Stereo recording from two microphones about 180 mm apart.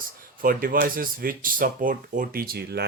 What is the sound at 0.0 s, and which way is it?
Speech, 50° right (ahead or behind).